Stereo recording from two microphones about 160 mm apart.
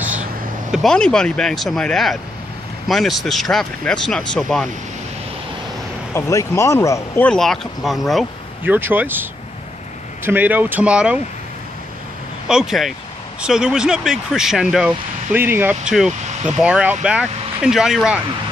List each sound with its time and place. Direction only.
0.7 s speech: 5° left (ahead or behind)
6.1 s speech: 20° left (ahead or behind)
7.2 s speech: centre (ahead or behind)
8.6 s speech: 10° right (ahead or behind)
12.4 s speech: 5° right (ahead or behind)